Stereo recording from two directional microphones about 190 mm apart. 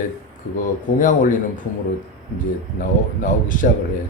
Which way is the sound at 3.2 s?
45° left (ahead or behind).